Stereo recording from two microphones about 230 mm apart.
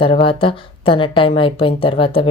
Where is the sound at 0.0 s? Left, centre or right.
Left.